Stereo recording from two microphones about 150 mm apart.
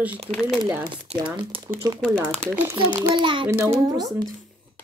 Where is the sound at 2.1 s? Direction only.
10° right (ahead or behind).